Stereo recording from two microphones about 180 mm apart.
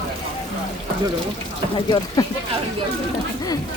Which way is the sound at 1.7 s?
25° left (ahead or behind).